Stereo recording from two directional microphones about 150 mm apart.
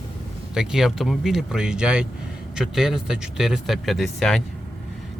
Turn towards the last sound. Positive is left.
turn(degrees=0)  # may be behind; listen again after turning